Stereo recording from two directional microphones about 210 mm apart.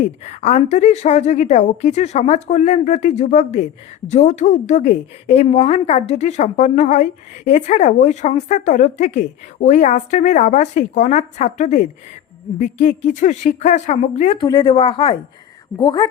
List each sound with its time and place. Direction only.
0.0 s a woman's voice: 35° left (ahead or behind)